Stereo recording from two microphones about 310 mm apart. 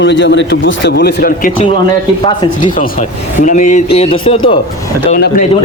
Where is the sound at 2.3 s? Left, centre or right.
Centre.